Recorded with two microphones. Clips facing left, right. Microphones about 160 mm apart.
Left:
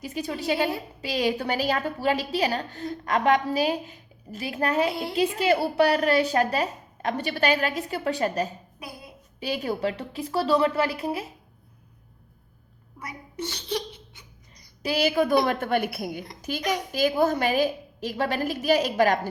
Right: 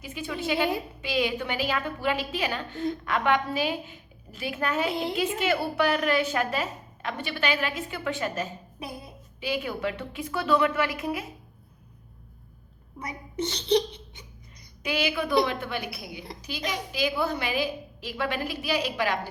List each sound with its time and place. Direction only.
0.0 s a woman's voice: 40° left (ahead or behind)
4.9 s a woman's voice: 20° right (ahead or behind)
5.4 s a woman's voice: 35° left (ahead or behind)
13.0 s a woman's voice: 25° right (ahead or behind)
14.8 s a woman's voice: 40° left (ahead or behind)